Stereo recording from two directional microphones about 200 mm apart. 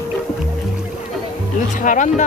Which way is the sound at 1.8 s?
40° left (ahead or behind).